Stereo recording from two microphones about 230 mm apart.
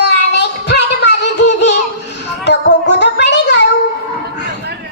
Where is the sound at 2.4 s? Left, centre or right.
Left.